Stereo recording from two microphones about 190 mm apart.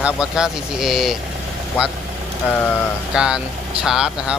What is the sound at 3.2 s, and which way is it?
Speech, 5° right (ahead or behind).